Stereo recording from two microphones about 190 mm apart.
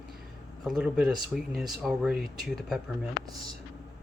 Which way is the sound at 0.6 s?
5° right (ahead or behind).